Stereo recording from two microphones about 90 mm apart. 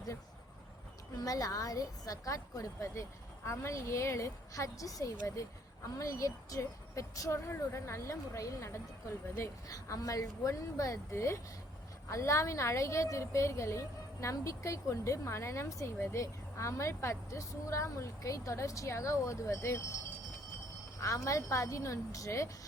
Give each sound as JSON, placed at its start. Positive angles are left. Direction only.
{"t": 1.1, "sound": "a woman's voice", "side_deg": 40}
{"t": 21.0, "sound": "a woman's voice", "side_deg": 35}